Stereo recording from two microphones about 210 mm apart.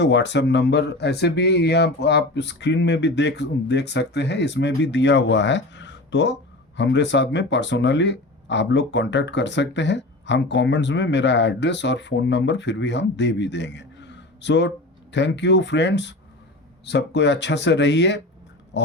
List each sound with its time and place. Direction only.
0.0 s speech: 55° left (ahead or behind)